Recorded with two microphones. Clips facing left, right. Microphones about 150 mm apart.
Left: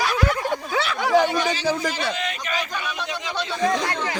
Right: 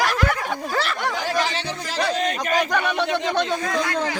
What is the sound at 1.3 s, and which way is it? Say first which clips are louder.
Speech: left 1 dB; 80° right.